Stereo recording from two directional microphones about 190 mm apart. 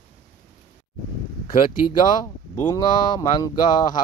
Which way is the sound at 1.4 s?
25° left (ahead or behind).